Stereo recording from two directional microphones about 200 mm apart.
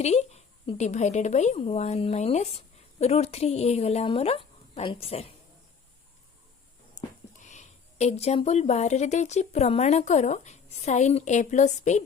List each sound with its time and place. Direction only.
0.0 s a woman's voice: 35° left (ahead or behind)
7.4 s a woman's voice: 35° left (ahead or behind)